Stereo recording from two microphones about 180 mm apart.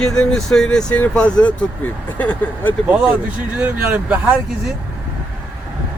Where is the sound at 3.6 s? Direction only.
10° right (ahead or behind).